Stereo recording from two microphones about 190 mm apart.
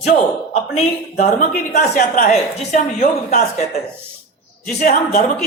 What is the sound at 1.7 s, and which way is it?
A man's voice, 45° left (ahead or behind).